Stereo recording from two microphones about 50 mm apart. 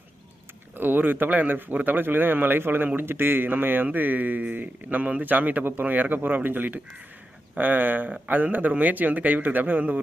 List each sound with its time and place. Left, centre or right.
0.8 s speech: right